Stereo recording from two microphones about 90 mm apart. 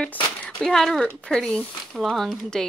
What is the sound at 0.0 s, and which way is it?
Speech, 10° left (ahead or behind).